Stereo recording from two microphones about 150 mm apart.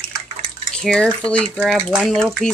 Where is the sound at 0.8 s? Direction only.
5° left (ahead or behind).